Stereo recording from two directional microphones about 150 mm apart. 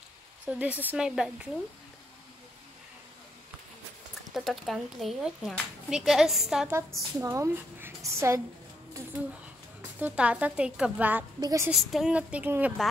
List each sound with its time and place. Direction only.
0.5 s speech: 10° right (ahead or behind)
4.3 s speech: centre (ahead or behind)
7.2 s a woman's voice: 20° right (ahead or behind)
9.8 s speech: 10° right (ahead or behind)
11.3 s a woman's voice: 20° right (ahead or behind)
11.7 s speech: 5° right (ahead or behind)